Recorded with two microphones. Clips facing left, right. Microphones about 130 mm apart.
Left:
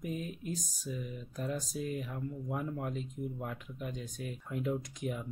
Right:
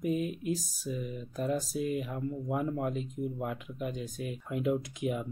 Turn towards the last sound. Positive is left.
turn(degrees=-10)  # may be behind; listen again after turning